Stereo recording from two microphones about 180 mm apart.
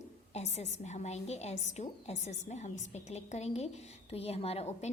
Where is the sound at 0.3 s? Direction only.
40° left (ahead or behind).